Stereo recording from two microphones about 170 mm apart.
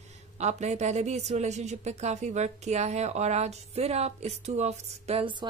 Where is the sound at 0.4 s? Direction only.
40° right (ahead or behind).